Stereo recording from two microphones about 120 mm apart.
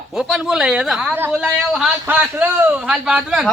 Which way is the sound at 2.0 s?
15° right (ahead or behind).